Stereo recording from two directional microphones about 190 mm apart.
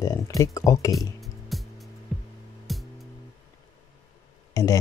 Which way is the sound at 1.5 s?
Centre (ahead or behind).